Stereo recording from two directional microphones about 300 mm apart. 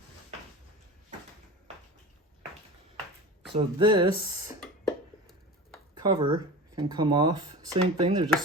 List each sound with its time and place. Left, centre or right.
3.5 s speech: centre
5.9 s speech: centre